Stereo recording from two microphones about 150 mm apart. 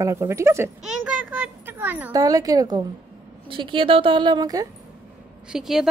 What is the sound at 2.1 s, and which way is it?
A woman's voice, 25° right (ahead or behind).